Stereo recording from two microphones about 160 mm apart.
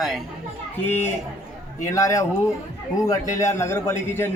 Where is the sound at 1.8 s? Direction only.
20° left (ahead or behind).